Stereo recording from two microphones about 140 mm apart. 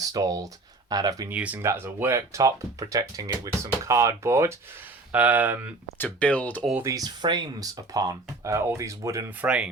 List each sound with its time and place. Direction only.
0.0 s speech: 25° right (ahead or behind)
1.3 s speech: 10° right (ahead or behind)
6.0 s speech: 10° left (ahead or behind)
6.8 s speech: 25° right (ahead or behind)
9.4 s speech: 5° right (ahead or behind)